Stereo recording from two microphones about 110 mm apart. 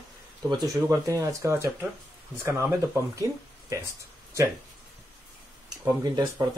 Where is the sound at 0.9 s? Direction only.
30° right (ahead or behind).